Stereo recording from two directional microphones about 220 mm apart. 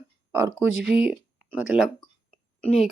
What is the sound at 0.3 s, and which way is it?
Speech, 10° right (ahead or behind).